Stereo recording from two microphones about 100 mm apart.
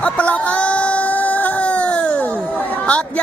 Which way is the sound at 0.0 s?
15° left (ahead or behind).